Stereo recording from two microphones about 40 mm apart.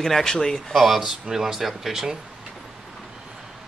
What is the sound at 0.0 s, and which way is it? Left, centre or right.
Speech, centre.